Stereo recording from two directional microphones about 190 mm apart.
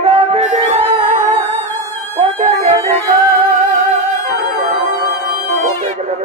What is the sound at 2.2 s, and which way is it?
Speech, 35° right (ahead or behind).